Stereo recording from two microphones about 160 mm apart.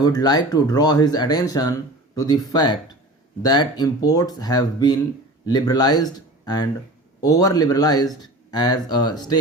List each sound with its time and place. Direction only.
0.0 s speech: 25° left (ahead or behind)